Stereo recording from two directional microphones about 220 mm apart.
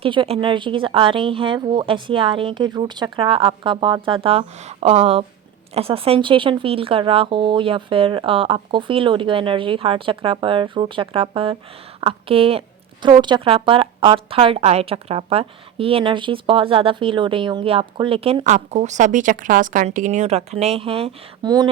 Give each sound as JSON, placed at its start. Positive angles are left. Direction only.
{"t": 0.0, "sound": "a woman's voice", "side_deg": -25}